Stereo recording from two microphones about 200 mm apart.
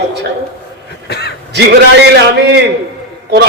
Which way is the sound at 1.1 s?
55° left (ahead or behind).